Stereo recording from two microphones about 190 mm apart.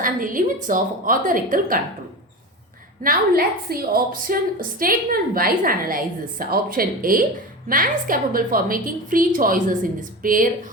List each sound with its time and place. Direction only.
0.0 s a woman's voice: 45° right (ahead or behind)
3.0 s a woman's voice: 50° right (ahead or behind)